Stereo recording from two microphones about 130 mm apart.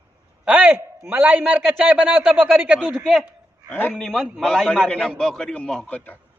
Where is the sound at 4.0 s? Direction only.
Centre (ahead or behind).